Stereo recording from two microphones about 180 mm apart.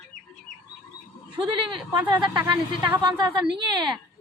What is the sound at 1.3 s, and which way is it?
Speech, 25° right (ahead or behind).